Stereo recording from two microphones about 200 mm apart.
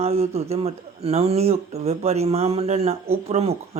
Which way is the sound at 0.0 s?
30° right (ahead or behind).